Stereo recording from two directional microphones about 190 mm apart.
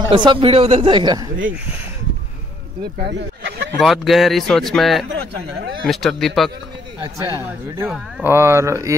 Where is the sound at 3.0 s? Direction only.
65° right (ahead or behind).